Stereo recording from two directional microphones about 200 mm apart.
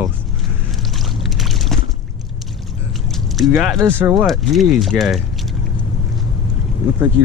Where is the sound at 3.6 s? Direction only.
Centre (ahead or behind).